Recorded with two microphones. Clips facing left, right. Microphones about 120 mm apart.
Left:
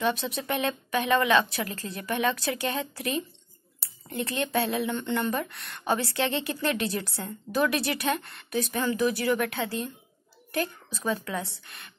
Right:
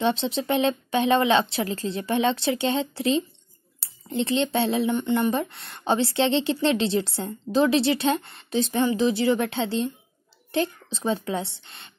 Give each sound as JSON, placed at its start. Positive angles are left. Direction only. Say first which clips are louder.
{"t": 0.0, "sound": "speech", "louder": "right 4 dB", "side_deg": -25}